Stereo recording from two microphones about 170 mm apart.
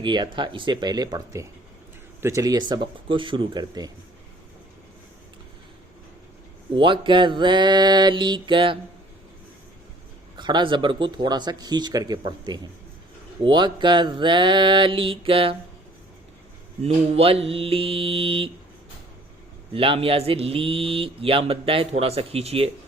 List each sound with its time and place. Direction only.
0.0 s speech: 25° right (ahead or behind)
6.7 s speech: 30° right (ahead or behind)
10.3 s speech: 25° right (ahead or behind)
16.8 s speech: 35° right (ahead or behind)
19.7 s speech: 30° right (ahead or behind)